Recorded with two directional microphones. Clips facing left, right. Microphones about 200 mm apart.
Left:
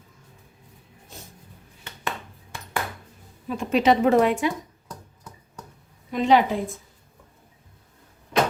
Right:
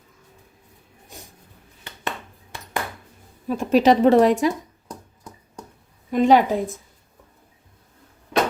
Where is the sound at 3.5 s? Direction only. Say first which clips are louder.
Right 4 dB; 40° right (ahead or behind).